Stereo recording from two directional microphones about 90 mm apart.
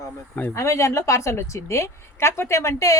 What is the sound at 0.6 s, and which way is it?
A woman's voice, 35° left (ahead or behind).